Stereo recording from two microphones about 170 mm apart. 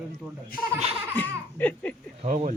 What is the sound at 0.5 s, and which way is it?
Speech, 55° left (ahead or behind).